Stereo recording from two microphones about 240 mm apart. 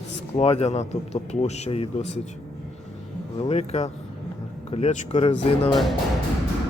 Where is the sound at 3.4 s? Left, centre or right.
Left.